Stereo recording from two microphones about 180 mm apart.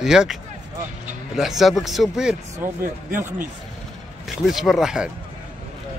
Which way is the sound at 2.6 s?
15° right (ahead or behind).